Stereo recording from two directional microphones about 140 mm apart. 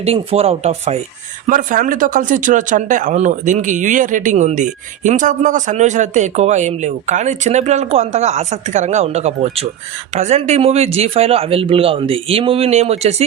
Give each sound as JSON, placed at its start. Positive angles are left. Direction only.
{"t": 0.0, "sound": "speech", "side_deg": -45}
{"t": 1.5, "sound": "speech", "side_deg": -70}